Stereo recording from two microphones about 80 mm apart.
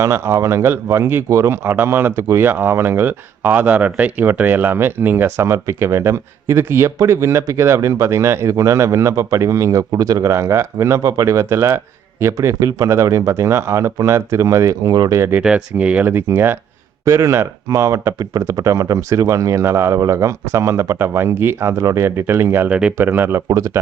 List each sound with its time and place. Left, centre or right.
0.0 s speech: right
15.1 s speech: right
15.4 s speech: centre
16.0 s speech: right
22.7 s speech: centre
23.0 s speech: right
23.5 s speech: right